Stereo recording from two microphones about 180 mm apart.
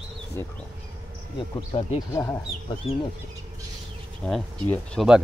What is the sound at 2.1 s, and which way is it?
Speech, 15° left (ahead or behind).